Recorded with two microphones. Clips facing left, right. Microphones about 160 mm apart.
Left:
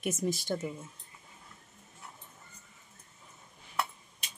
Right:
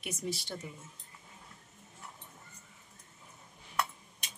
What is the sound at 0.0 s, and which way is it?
Speech, 45° left (ahead or behind).